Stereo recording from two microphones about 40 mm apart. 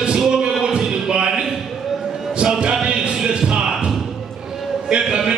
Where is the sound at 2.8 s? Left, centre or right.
Right.